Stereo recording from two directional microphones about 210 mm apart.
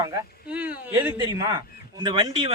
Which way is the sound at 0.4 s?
5° right (ahead or behind).